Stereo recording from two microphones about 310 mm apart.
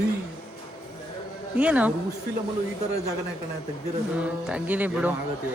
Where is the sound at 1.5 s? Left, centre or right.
Centre.